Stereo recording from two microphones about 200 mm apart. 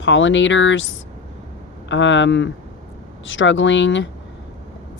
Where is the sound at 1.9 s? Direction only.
65° left (ahead or behind).